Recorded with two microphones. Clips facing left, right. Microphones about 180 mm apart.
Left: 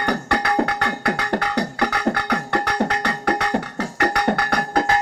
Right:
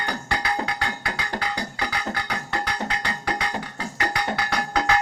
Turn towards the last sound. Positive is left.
turn(degrees=50)  # may be behind; listen again after turning